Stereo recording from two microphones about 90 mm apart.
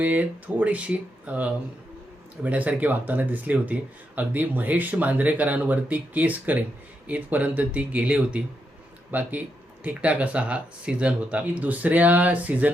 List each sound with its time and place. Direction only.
0.0 s speech: 20° right (ahead or behind)